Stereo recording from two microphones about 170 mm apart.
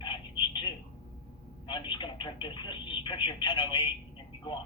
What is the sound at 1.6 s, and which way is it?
Speech, 30° left (ahead or behind).